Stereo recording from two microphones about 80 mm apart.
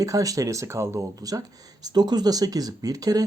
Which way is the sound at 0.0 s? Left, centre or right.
Right.